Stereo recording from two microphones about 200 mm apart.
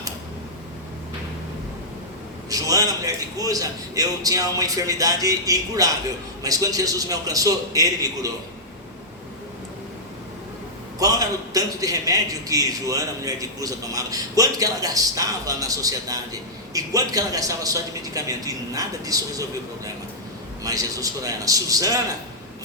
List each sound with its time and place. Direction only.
2.5 s a man's voice: 15° right (ahead or behind)
11.0 s a man's voice: 15° right (ahead or behind)